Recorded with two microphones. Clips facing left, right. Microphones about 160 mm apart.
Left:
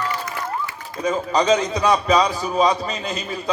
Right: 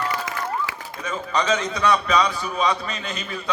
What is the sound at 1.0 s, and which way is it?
A man's voice, 40° left (ahead or behind).